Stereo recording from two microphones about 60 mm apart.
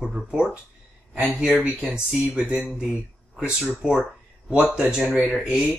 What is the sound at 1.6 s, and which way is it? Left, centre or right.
Speech, centre.